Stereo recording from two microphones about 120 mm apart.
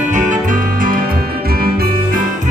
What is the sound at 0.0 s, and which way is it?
Music, 90° right.